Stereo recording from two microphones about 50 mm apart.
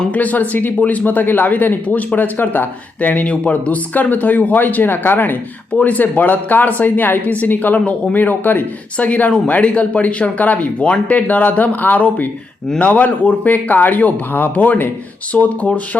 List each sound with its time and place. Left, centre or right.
0.1 s speech: left